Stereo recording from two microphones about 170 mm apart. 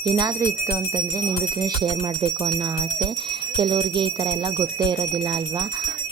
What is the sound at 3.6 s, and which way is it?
Speech, 25° right (ahead or behind).